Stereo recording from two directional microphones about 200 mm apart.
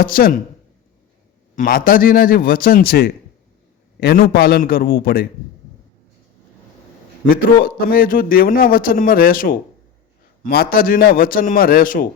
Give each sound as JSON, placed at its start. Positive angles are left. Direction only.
{"t": 0.0, "sound": "a man's voice", "side_deg": 45}
{"t": 1.5, "sound": "a man's voice", "side_deg": 45}
{"t": 7.3, "sound": "a man's voice", "side_deg": 45}